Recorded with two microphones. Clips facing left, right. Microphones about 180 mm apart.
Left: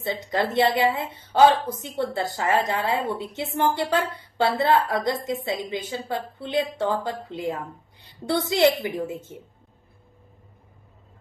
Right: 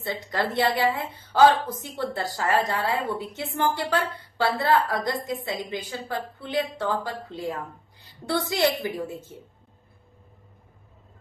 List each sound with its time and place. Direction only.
0.0 s a woman's voice: 20° left (ahead or behind)